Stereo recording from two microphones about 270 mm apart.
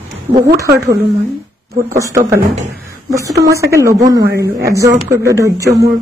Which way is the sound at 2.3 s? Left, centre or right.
Right.